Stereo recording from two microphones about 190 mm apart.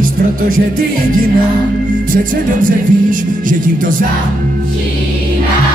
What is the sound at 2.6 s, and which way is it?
Music, 45° right (ahead or behind).